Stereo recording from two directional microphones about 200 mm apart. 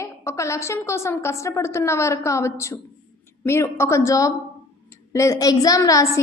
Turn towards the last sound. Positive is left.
turn(degrees=15)  # may be behind; listen again after turning